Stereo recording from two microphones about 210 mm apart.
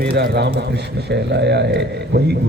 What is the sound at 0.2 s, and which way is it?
A man's voice, 50° right (ahead or behind).